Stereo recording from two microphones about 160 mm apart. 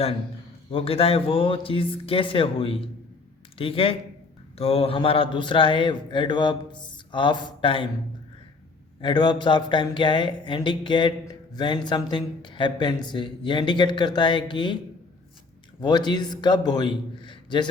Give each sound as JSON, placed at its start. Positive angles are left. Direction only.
{"t": 0.7, "sound": "a man's voice", "side_deg": 35}
{"t": 9.0, "sound": "speech", "side_deg": 30}
{"t": 15.8, "sound": "speech", "side_deg": 25}